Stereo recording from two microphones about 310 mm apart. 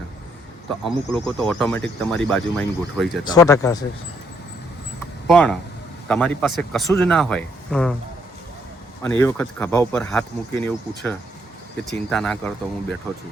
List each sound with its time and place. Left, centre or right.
0.9 s speech: centre
5.3 s speech: centre
9.0 s speech: centre